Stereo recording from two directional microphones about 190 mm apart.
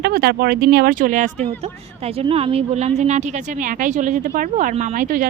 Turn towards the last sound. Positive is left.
turn(degrees=-45)  # may be behind; listen again after turning